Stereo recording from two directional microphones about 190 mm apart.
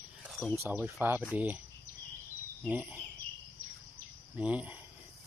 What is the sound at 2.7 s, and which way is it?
Speech, 10° right (ahead or behind).